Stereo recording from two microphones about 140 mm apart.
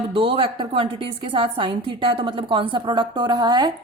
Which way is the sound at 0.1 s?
40° right (ahead or behind).